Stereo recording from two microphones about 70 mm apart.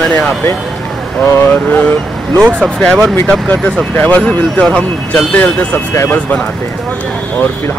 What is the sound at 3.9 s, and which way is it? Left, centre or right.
Speech, left.